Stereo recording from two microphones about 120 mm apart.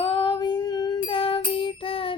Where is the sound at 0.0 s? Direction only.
40° left (ahead or behind).